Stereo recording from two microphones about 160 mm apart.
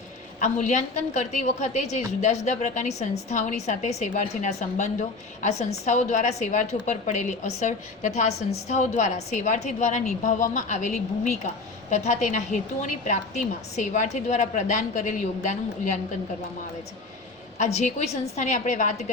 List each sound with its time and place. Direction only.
0.3 s a woman's voice: 50° left (ahead or behind)
17.7 s a woman's voice: 45° left (ahead or behind)